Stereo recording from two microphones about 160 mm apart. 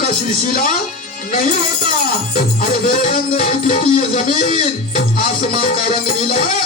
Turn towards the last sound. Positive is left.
turn(degrees=45)  # may be behind; listen again after turning